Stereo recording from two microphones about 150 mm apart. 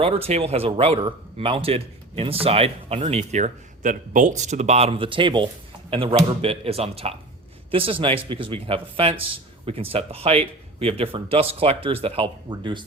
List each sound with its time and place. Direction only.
0.0 s speech: 40° right (ahead or behind)